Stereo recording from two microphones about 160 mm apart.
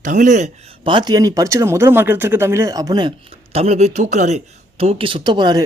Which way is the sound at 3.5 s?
40° right (ahead or behind).